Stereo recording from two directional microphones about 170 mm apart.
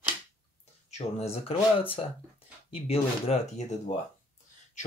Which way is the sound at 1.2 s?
35° left (ahead or behind).